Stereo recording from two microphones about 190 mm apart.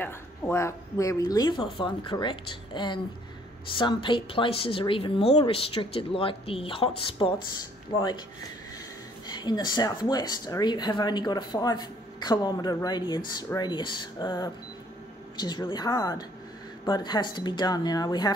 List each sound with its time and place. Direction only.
0.0 s speech: 10° left (ahead or behind)
9.3 s speech: 25° left (ahead or behind)